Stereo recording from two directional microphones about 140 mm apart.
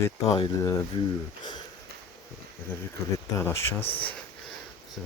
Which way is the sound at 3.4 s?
20° left (ahead or behind).